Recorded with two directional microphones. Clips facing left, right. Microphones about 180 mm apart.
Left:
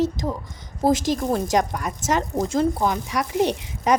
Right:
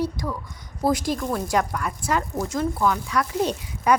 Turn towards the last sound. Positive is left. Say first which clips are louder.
# left 1 dB
turn(degrees=20)  # may be behind; listen again after turning